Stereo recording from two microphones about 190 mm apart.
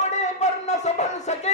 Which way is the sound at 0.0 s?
35° left (ahead or behind).